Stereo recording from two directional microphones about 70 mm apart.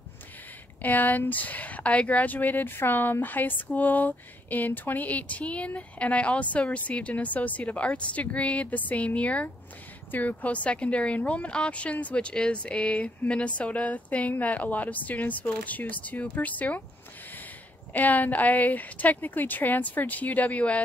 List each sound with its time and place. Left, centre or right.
0.8 s speech: left
17.9 s speech: left